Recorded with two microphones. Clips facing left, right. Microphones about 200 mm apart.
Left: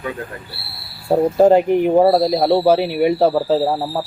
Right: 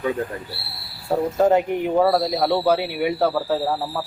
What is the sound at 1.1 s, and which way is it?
Speech, 30° left (ahead or behind).